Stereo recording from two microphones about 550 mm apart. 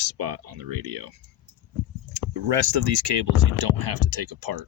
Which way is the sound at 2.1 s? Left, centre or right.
Right.